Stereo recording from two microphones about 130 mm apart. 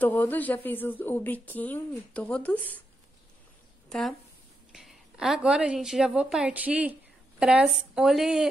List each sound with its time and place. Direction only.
0.0 s a woman's voice: 15° left (ahead or behind)
4.7 s speech: 5° right (ahead or behind)